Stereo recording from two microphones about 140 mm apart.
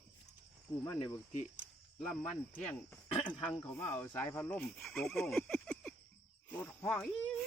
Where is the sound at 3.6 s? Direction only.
15° left (ahead or behind).